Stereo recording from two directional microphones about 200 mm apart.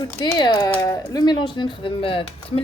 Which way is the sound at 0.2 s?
20° left (ahead or behind).